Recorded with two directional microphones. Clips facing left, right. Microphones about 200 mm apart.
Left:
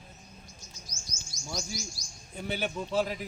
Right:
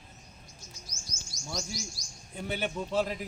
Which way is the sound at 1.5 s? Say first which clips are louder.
Even; 5° left (ahead or behind).